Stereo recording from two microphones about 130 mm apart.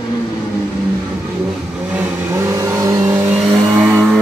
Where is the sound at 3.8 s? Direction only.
5° right (ahead or behind).